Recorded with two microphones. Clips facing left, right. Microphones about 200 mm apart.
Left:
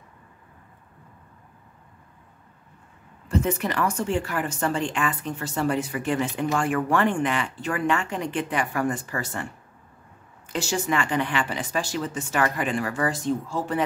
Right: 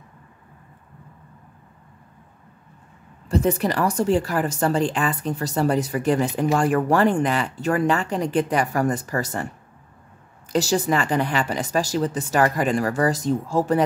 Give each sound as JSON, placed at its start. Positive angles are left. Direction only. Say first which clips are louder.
{"t": 3.3, "sound": "speech", "louder": "right 4 dB", "side_deg": -35}
{"t": 10.5, "sound": "speech", "louder": "right 5 dB", "side_deg": -35}